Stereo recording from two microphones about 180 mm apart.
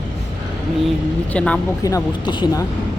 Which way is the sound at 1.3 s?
5° left (ahead or behind).